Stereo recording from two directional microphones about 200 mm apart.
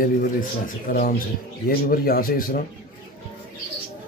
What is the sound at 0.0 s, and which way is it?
Speech, 45° left (ahead or behind).